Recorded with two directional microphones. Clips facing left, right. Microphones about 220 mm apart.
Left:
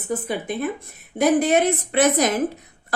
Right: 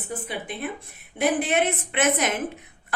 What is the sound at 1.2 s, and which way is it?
A woman's voice, 40° left (ahead or behind).